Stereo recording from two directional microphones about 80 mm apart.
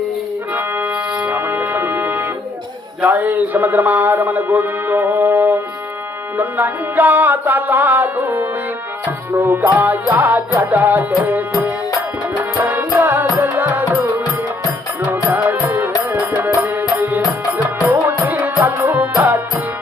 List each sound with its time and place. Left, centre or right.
0.5 s music: right
15.1 s music: right